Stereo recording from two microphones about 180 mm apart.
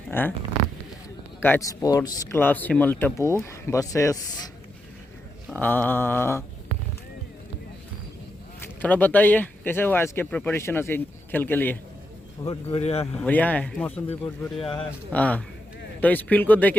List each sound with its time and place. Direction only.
0.1 s speech: 10° left (ahead or behind)
1.4 s speech: 10° left (ahead or behind)
5.5 s speech: 10° left (ahead or behind)
8.6 s speech: 10° left (ahead or behind)
12.4 s speech: 25° left (ahead or behind)
12.8 s speech: 35° left (ahead or behind)
13.1 s speech: 10° left (ahead or behind)